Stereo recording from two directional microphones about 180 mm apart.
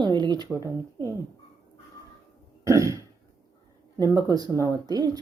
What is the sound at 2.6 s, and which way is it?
Throat clearing, 15° right (ahead or behind).